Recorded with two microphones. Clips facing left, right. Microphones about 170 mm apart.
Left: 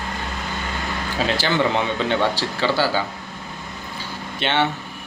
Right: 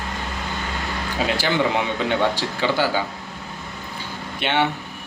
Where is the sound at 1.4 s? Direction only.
15° right (ahead or behind).